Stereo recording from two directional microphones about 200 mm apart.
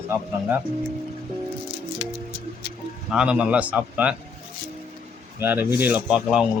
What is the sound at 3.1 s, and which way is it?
Speech, 5° right (ahead or behind).